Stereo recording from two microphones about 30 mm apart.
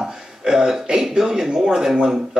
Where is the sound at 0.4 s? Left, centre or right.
Right.